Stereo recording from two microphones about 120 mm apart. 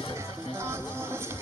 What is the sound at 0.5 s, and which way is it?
Music, 20° right (ahead or behind).